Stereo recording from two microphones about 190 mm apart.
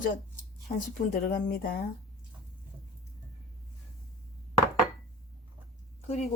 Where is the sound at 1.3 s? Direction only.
50° left (ahead or behind).